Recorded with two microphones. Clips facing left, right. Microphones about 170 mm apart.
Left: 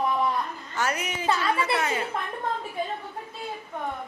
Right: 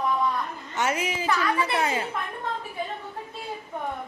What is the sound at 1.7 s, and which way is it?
Speech, 25° right (ahead or behind).